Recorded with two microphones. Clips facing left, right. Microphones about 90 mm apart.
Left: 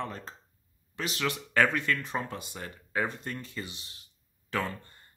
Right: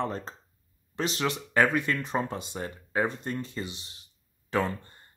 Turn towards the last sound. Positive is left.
turn(degrees=-25)  # may be behind; listen again after turning